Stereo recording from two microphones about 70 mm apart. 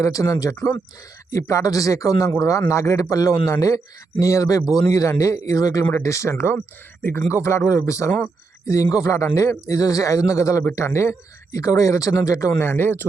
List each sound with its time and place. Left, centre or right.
0.0 s speech: left
5.9 s speech: left
11.5 s speech: left